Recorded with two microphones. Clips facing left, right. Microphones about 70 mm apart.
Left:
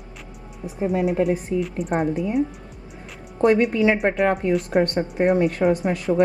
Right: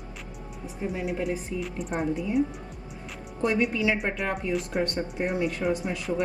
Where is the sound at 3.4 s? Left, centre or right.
Left.